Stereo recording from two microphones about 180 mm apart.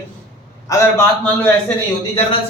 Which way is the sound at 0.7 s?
20° left (ahead or behind).